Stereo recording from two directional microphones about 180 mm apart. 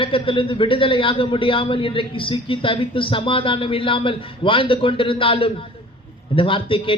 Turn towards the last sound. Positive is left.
turn(degrees=30)  # may be behind; listen again after turning